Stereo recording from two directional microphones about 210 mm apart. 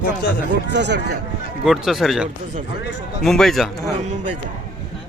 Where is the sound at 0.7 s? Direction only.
55° right (ahead or behind).